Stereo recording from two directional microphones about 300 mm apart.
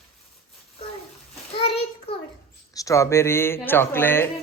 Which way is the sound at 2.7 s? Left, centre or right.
Centre.